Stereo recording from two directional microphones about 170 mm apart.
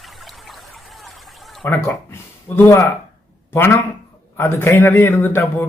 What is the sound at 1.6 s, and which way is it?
A man's voice, 15° left (ahead or behind).